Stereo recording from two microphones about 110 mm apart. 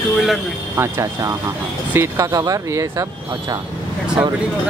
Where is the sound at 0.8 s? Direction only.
30° right (ahead or behind).